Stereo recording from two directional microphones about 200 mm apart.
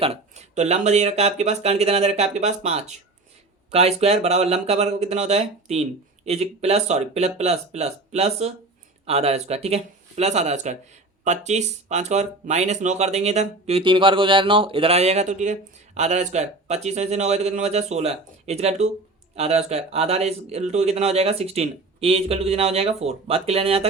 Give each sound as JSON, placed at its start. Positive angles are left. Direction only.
{"t": 0.0, "sound": "speech", "side_deg": -30}